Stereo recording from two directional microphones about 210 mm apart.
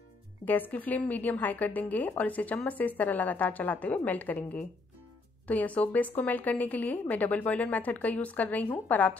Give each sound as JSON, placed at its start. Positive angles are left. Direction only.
{"t": 0.5, "sound": "a woman's voice", "side_deg": 10}